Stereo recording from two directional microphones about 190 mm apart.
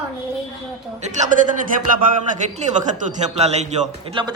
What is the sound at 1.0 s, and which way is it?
A man's voice, 40° right (ahead or behind).